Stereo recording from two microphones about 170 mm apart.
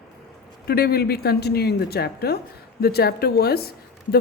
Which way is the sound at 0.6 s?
65° left (ahead or behind).